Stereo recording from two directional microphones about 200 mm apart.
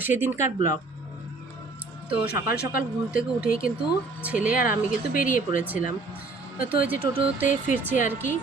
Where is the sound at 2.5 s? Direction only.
50° left (ahead or behind).